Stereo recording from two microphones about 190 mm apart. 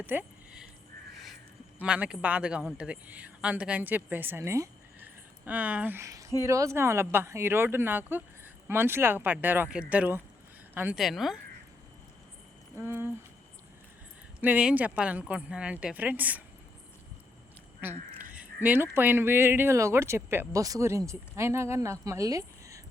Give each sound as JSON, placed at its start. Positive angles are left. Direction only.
{"t": 0.0, "sound": "a sound", "side_deg": -10}
{"t": 1.8, "sound": "a woman's voice", "side_deg": -5}
{"t": 12.8, "sound": "speech", "side_deg": -10}
{"t": 14.4, "sound": "speech", "side_deg": -5}
{"t": 17.7, "sound": "speech", "side_deg": -10}